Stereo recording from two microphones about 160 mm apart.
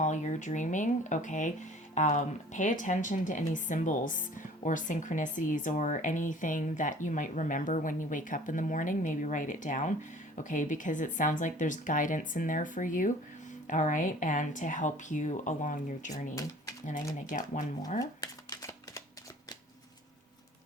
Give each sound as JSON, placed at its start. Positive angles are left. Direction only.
{"t": 0.0, "sound": "speech", "side_deg": 50}
{"t": 16.3, "sound": "speech", "side_deg": 20}
{"t": 17.2, "sound": "speech", "side_deg": 55}
{"t": 18.0, "sound": "shuffling cards", "side_deg": 20}